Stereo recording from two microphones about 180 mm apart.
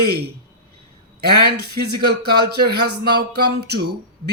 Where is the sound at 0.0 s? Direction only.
65° right (ahead or behind).